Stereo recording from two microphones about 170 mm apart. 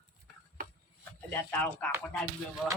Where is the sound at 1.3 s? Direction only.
10° left (ahead or behind).